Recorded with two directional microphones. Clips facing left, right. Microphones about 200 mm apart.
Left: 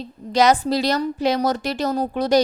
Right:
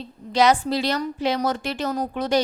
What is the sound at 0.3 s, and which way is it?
A woman's voice, 40° left (ahead or behind).